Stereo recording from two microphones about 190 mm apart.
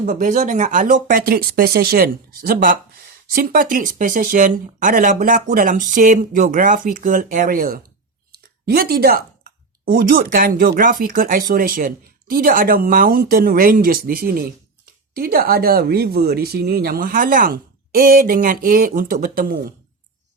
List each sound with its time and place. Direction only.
0.0 s speech: 40° right (ahead or behind)